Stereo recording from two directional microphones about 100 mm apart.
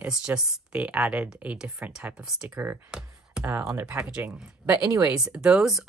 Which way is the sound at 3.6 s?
35° right (ahead or behind).